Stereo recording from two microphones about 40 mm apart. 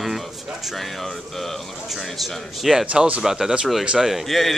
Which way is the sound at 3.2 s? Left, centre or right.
Centre.